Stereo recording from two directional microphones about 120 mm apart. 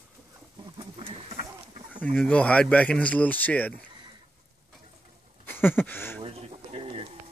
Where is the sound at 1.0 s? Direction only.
50° right (ahead or behind).